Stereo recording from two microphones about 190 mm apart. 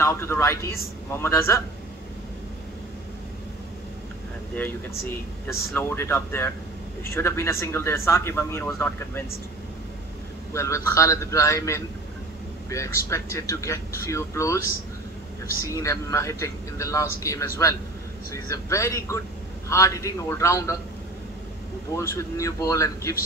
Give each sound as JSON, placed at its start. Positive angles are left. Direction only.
{"t": 0.0, "sound": "speech", "side_deg": 15}
{"t": 5.5, "sound": "speech", "side_deg": 0}
{"t": 5.8, "sound": "speech", "side_deg": 10}
{"t": 10.5, "sound": "speech", "side_deg": 15}
{"t": 21.9, "sound": "speech", "side_deg": 15}